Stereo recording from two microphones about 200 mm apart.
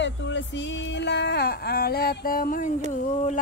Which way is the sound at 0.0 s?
65° left (ahead or behind).